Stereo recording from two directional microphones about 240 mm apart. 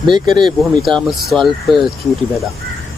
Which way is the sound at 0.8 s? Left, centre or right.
Centre.